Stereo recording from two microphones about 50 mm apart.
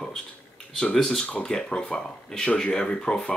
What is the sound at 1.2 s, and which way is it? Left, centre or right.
Speech, left.